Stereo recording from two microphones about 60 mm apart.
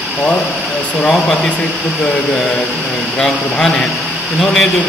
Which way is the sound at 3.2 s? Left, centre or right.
Centre.